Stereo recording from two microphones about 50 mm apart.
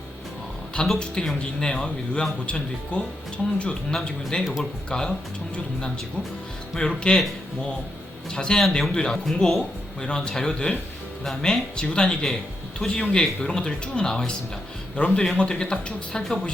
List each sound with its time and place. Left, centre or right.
0.9 s speech: centre
6.7 s speech: centre
8.3 s speech: centre